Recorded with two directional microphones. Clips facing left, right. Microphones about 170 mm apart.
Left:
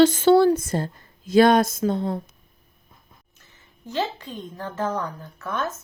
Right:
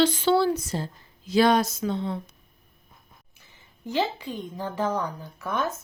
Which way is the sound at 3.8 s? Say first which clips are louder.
Right 1 dB; 10° right (ahead or behind).